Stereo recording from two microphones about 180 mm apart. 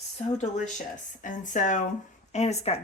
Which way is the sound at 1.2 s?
45° left (ahead or behind).